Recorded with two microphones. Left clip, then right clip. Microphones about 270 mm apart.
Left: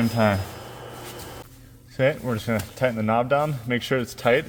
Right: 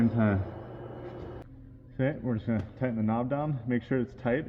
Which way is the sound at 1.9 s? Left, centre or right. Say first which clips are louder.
Left 9 dB; left.